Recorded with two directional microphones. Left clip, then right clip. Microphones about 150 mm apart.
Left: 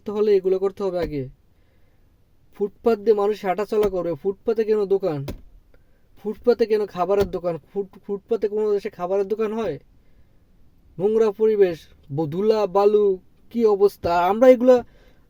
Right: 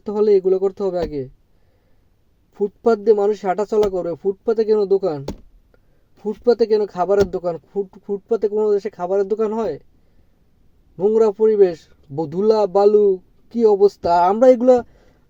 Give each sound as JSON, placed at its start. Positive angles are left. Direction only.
{"t": 0.0, "sound": "speech", "side_deg": 10}
{"t": 2.6, "sound": "speech", "side_deg": 10}
{"t": 6.2, "sound": "speech", "side_deg": 15}
{"t": 10.9, "sound": "speech", "side_deg": 15}